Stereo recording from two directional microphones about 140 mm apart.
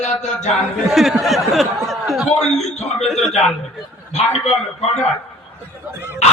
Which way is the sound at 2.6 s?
50° left (ahead or behind).